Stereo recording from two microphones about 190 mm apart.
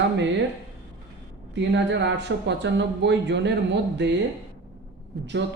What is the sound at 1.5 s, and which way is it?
Speech, 65° right (ahead or behind).